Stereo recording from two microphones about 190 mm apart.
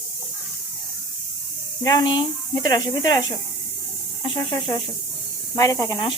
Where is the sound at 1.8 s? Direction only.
20° left (ahead or behind).